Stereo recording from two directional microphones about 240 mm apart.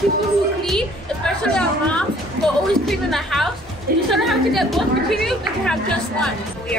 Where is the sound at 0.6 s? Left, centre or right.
Centre.